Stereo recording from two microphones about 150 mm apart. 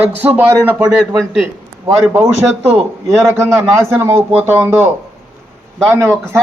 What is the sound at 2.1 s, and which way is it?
A man's voice, 20° right (ahead or behind).